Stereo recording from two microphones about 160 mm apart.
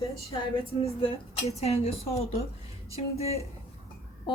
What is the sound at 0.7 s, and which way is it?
A woman's voice, 35° left (ahead or behind).